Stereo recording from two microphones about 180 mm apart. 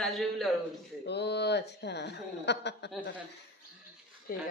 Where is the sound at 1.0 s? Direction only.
70° left (ahead or behind).